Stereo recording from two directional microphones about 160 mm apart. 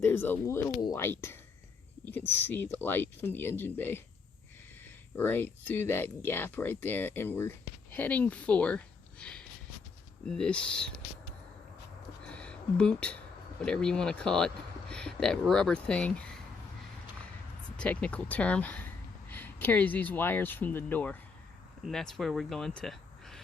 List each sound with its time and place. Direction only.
0.0 s speech: 15° left (ahead or behind)
5.1 s speech: 10° left (ahead or behind)
12.2 s a sound: 5° left (ahead or behind)
13.7 s speech: 5° left (ahead or behind)
17.7 s speech: 10° left (ahead or behind)